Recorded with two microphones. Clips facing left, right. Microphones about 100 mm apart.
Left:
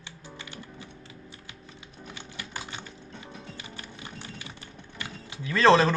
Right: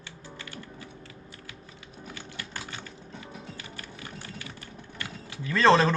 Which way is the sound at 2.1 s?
20° left (ahead or behind).